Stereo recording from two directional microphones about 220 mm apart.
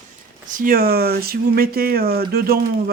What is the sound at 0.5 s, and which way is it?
Speech, 40° right (ahead or behind).